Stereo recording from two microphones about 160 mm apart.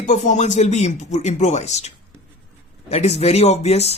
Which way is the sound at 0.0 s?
50° left (ahead or behind).